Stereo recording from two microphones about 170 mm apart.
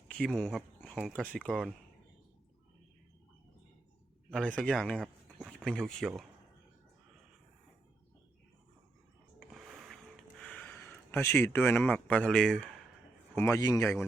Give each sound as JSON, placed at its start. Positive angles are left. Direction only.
{"t": 0.1, "sound": "speech", "side_deg": 0}
{"t": 4.3, "sound": "speech", "side_deg": 5}
{"t": 9.4, "sound": "a sound", "side_deg": 0}
{"t": 10.4, "sound": "speech", "side_deg": 10}
{"t": 13.3, "sound": "a man's voice", "side_deg": 15}